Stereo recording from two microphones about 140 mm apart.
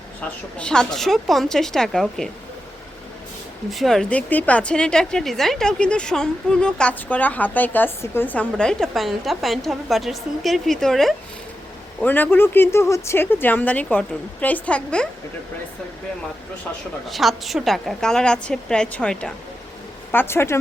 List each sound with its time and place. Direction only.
0.2 s a woman's voice: 10° left (ahead or behind)
3.7 s a woman's voice: centre (ahead or behind)
11.9 s speech: 10° left (ahead or behind)
17.1 s a woman's voice: centre (ahead or behind); by 20.6 s 20° left (ahead or behind)